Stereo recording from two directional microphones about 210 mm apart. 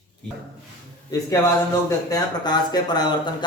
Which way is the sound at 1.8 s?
15° left (ahead or behind).